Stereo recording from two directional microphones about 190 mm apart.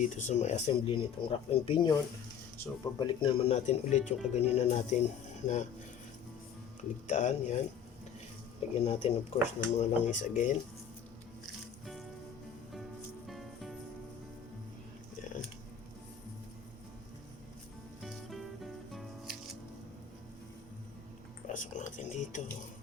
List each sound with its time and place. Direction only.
0.0 s speech: 40° left (ahead or behind)
3.0 s speech: 25° left (ahead or behind)
7.1 s speech: 40° left (ahead or behind)
8.8 s speech: 30° left (ahead or behind)
13.2 s music: centre (ahead or behind)
18.0 s music: centre (ahead or behind)
21.5 s a sound: 40° left (ahead or behind)